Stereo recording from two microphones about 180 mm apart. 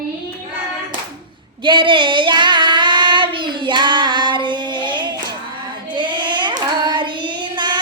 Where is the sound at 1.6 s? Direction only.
25° right (ahead or behind).